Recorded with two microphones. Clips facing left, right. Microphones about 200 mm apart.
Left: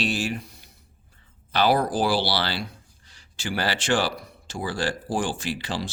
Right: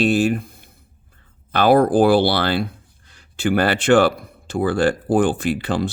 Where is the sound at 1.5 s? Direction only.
55° right (ahead or behind).